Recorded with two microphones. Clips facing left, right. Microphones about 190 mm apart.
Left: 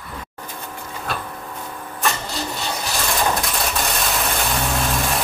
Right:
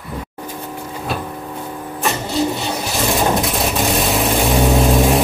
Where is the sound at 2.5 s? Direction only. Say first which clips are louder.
Right 4 dB; 20° right (ahead or behind).